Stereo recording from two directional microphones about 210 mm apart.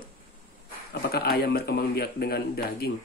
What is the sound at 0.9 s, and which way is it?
Speech, 45° left (ahead or behind).